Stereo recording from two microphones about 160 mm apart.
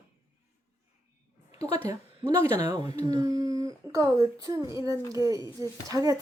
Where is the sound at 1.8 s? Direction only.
20° right (ahead or behind).